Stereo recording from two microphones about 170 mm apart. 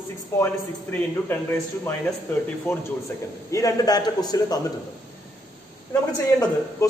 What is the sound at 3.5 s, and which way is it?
A man's voice, 20° left (ahead or behind).